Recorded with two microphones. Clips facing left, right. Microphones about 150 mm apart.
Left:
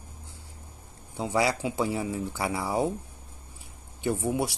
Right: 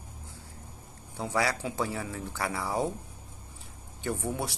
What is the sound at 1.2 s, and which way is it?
Speech, 15° left (ahead or behind).